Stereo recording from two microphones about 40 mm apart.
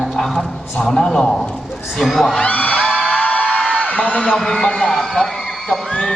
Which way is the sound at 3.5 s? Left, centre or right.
Left.